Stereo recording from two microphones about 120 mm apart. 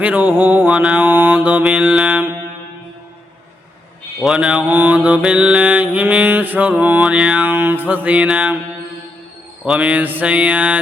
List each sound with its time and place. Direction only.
0.0 s mantra: 15° right (ahead or behind)
4.2 s mantra: 5° right (ahead or behind)
9.6 s mantra: 10° right (ahead or behind)